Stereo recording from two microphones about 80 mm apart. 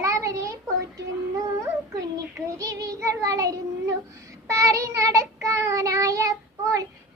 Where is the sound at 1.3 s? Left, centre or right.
Right.